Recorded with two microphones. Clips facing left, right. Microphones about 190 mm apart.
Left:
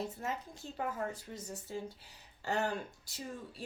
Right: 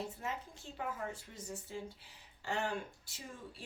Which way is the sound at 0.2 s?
40° left (ahead or behind).